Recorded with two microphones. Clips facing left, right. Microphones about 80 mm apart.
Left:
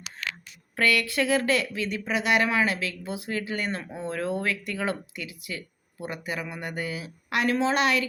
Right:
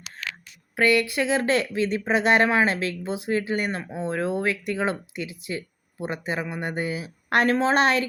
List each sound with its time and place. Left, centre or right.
0.8 s speech: right
7.3 s a woman's voice: right